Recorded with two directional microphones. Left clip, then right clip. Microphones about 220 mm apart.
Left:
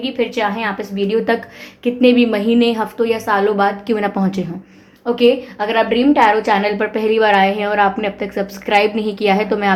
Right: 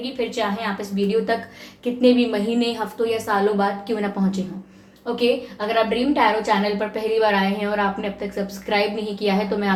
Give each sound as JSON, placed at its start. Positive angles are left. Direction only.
{"t": 0.0, "sound": "a woman's voice", "side_deg": 45}